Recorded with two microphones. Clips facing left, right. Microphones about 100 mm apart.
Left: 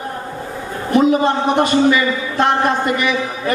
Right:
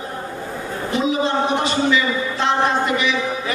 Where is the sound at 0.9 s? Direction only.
50° left (ahead or behind).